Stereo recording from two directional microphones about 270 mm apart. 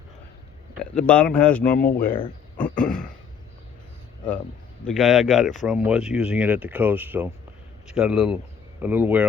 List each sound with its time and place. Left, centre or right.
0.9 s speech: centre
1.7 s speech: left
2.7 s speech: centre
4.9 s speech: centre